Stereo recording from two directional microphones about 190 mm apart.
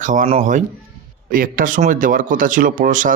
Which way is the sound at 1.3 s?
45° right (ahead or behind).